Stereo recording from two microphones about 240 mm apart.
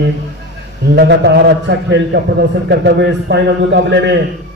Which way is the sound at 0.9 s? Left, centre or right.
Right.